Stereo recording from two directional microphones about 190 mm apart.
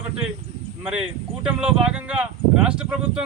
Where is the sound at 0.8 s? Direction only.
5° right (ahead or behind).